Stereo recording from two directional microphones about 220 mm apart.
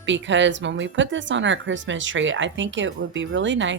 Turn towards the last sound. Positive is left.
turn(degrees=-55)  # may be behind; listen again after turning